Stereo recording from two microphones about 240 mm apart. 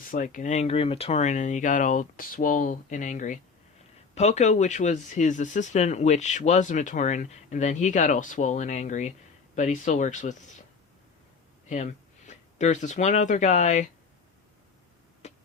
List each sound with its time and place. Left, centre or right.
0.0 s speech: left
11.7 s speech: left
15.2 s a sound: left